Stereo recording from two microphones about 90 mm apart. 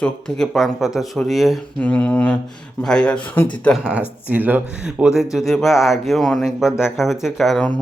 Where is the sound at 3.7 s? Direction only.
10° right (ahead or behind).